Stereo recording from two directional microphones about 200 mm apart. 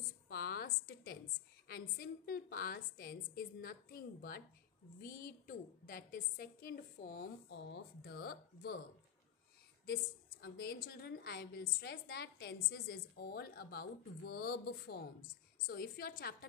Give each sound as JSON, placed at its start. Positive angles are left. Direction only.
{"t": 0.3, "sound": "a sound", "side_deg": 50}
{"t": 1.7, "sound": "a woman's voice", "side_deg": 45}
{"t": 10.4, "sound": "a woman's voice", "side_deg": 55}